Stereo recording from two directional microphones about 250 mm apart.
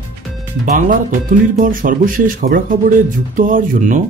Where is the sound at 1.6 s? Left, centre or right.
Right.